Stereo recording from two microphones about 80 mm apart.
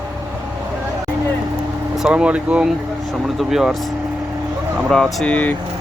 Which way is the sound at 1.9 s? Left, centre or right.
Centre.